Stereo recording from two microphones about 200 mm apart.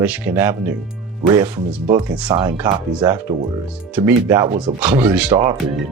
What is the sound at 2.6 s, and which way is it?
Speech, 5° right (ahead or behind).